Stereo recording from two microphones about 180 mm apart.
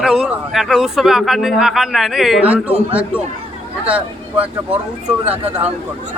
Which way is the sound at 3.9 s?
5° right (ahead or behind).